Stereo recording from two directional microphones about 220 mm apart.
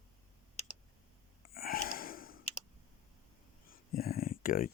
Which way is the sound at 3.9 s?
40° left (ahead or behind).